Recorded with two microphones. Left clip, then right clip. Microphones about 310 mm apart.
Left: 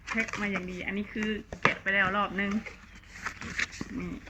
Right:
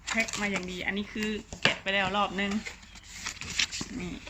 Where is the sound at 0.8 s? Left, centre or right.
Right.